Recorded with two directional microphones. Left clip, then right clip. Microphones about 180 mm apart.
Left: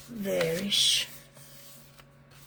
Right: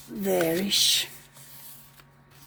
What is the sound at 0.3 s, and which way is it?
Speech, 60° right (ahead or behind).